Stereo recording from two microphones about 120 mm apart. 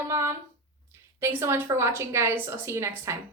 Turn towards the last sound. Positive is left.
turn(degrees=-20)  # may be behind; listen again after turning